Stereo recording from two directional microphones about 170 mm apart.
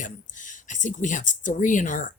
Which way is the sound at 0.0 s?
50° left (ahead or behind).